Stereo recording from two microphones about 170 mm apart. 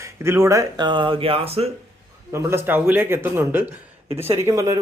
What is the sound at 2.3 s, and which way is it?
Speech, 15° right (ahead or behind).